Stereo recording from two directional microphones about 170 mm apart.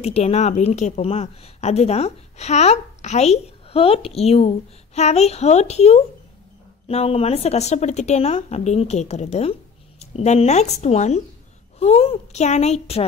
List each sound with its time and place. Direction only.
0.0 s a woman's voice: 40° left (ahead or behind)